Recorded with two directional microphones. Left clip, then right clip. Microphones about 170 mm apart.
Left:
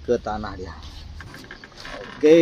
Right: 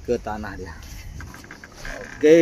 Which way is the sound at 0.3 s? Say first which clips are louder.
Left 2 dB; 10° right (ahead or behind).